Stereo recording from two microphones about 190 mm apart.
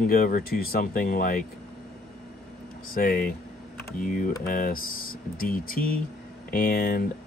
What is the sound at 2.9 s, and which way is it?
Speech, 50° left (ahead or behind).